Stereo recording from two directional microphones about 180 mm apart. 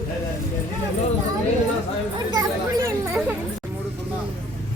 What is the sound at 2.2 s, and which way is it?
Chatter, 20° right (ahead or behind).